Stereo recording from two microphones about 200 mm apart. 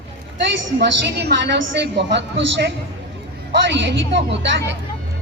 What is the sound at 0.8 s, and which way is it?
A woman's voice, 55° right (ahead or behind).